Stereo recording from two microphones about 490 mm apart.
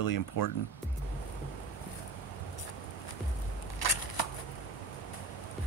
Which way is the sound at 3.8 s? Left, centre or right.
Left.